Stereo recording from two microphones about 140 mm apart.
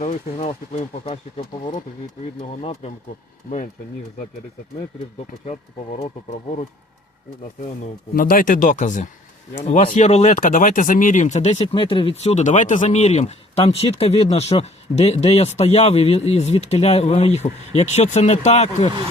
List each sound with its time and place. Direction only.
0.0 s speech: 70° left (ahead or behind)
0.4 s speech: 45° left (ahead or behind)
2.4 s speech: 40° left (ahead or behind)
8.1 s speech: 85° left; by 9.0 s 60° left (ahead or behind)
9.9 s speech: 50° left (ahead or behind)
11.6 s speech: 35° left (ahead or behind); by 18.9 s 55° left (ahead or behind)